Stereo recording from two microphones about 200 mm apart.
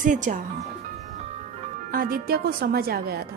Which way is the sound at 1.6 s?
45° right (ahead or behind).